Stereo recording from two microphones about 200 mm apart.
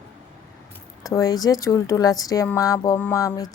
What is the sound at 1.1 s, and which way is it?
A woman's voice, 15° left (ahead or behind).